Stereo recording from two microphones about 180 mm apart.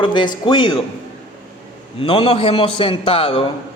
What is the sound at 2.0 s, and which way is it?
A man's voice, 30° left (ahead or behind).